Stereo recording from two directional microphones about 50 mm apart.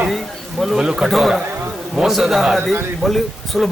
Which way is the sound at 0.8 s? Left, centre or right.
Centre.